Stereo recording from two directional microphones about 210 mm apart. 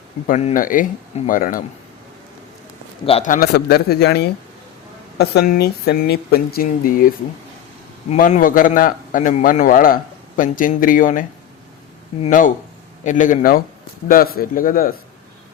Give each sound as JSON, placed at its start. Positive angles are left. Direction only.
{"t": 0.3, "sound": "a man's voice", "side_deg": 35}
{"t": 3.1, "sound": "speech", "side_deg": 35}
{"t": 8.1, "sound": "a man's voice", "side_deg": 35}